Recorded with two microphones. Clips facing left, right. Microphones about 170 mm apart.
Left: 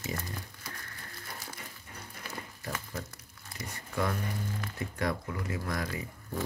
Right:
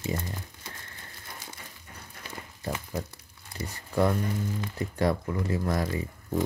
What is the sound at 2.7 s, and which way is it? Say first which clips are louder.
Speech: right 6 dB; 25° right (ahead or behind).